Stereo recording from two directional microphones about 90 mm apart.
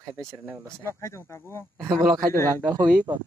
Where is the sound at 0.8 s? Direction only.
30° left (ahead or behind).